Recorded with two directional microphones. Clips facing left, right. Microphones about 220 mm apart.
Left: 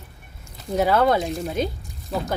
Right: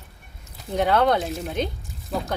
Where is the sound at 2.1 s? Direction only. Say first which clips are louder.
Left 1 dB; centre (ahead or behind).